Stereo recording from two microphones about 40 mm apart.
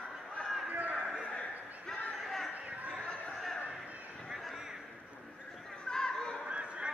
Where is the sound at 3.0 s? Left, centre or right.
Centre.